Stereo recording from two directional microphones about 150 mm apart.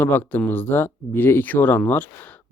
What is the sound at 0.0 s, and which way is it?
Speech, 15° left (ahead or behind).